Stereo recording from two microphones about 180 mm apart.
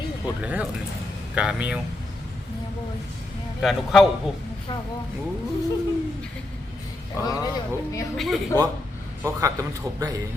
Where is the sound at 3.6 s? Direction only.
Centre (ahead or behind).